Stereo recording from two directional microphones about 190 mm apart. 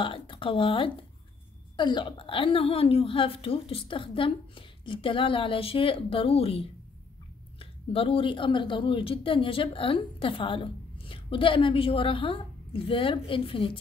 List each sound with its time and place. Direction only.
0.0 s a woman's voice: 25° left (ahead or behind)